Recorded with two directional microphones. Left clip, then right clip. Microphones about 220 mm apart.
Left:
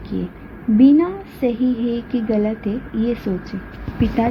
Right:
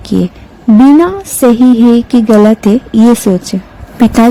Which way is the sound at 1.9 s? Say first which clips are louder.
Right 14 dB; 65° right (ahead or behind).